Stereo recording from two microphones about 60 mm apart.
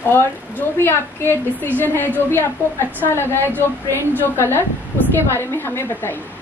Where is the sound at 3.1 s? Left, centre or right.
Left.